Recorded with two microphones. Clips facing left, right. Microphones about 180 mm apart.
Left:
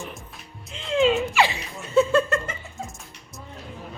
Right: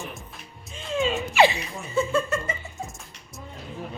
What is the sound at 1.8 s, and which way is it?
Chuckle, 70° left (ahead or behind).